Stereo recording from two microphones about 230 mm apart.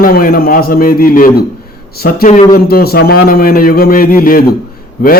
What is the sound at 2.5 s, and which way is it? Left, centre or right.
A man's voice, left.